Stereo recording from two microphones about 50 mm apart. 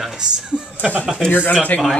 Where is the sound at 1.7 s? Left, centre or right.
Left.